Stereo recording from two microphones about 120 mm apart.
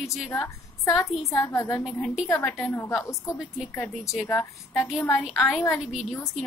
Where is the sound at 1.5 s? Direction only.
25° left (ahead or behind).